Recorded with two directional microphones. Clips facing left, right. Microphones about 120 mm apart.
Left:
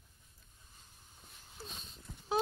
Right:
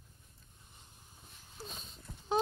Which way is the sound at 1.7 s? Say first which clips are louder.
Right 1 dB; centre (ahead or behind).